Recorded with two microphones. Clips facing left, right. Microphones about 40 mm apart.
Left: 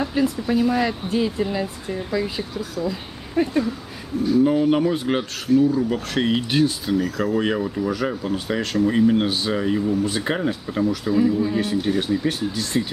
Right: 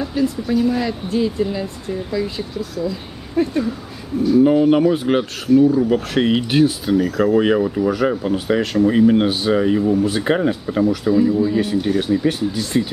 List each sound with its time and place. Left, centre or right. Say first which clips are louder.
0.0 s speech: right 1 dB; centre
4.4 s speech: right 5 dB; centre